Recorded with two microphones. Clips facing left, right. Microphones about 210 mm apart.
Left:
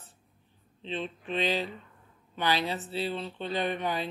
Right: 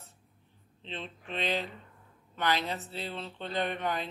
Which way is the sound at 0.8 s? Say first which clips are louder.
Left 6 dB; 15° left (ahead or behind).